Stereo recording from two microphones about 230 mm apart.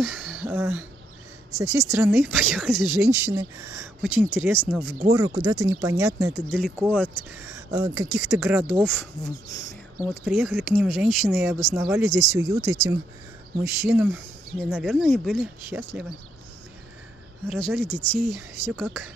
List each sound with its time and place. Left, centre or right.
0.0 s speech: centre
5.4 s speech: centre
9.5 s speech: centre
10.2 s speech: centre
17.5 s speech: centre